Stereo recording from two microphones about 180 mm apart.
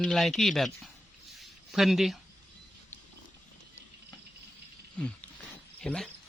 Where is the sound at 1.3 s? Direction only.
Centre (ahead or behind).